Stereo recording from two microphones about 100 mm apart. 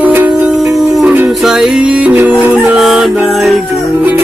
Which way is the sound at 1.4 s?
5° right (ahead or behind).